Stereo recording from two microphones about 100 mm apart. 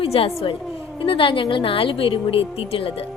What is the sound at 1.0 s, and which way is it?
A woman's voice, 60° left (ahead or behind).